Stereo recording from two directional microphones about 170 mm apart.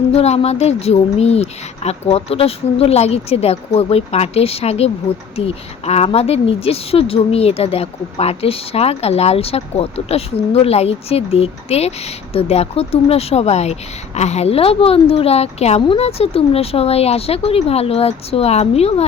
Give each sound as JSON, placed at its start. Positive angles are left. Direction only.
{"t": 0.1, "sound": "speech", "side_deg": 35}